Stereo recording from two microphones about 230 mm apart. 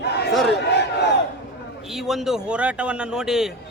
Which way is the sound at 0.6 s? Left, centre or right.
Left.